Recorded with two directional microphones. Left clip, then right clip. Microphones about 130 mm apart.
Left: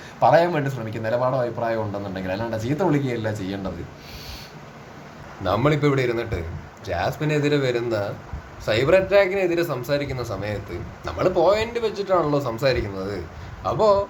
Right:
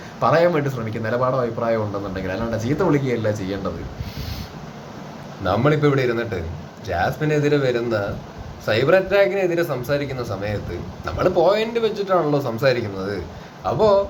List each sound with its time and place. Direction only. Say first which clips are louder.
0.2 s a man's voice: even; 15° left (ahead or behind)
5.4 s a man's voice: right 2 dB; 20° left (ahead or behind)